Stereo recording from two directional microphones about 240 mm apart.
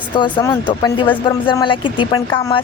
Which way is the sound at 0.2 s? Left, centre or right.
Centre.